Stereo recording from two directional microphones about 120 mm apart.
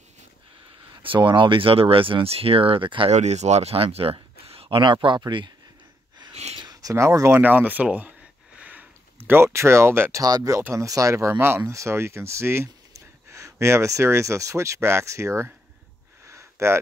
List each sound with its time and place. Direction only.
1.0 s speech: 45° right (ahead or behind)
3.1 s speech: 70° right (ahead or behind); by 5.5 s 40° right (ahead or behind)
6.5 s speech: 35° right (ahead or behind); by 8.1 s 10° right (ahead or behind)
8.5 s sniff: 15° right (ahead or behind)
9.3 s speech: 20° right (ahead or behind)
10.2 s speech: 30° right (ahead or behind)
16.3 s a sound: 25° right (ahead or behind)